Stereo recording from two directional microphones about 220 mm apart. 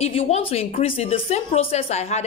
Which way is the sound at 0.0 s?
25° left (ahead or behind).